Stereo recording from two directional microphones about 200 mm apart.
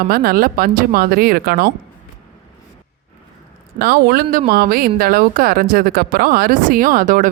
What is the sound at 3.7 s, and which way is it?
Speech, 50° right (ahead or behind).